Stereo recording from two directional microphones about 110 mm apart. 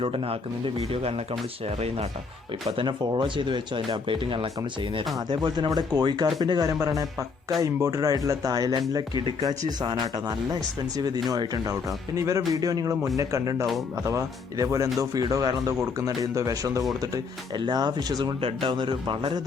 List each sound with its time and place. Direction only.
0.0 s speech: 60° right (ahead or behind)
2.8 s speech: 45° right (ahead or behind); by 16.8 s 30° right (ahead or behind)
17.5 s speech: 40° right (ahead or behind)
18.4 s speech: 50° right (ahead or behind)